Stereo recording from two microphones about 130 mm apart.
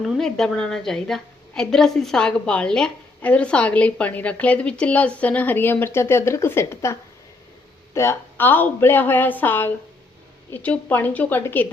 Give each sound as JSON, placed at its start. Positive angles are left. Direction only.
{"t": 0.0, "sound": "a woman's voice", "side_deg": 5}
{"t": 7.9, "sound": "a woman's voice", "side_deg": 20}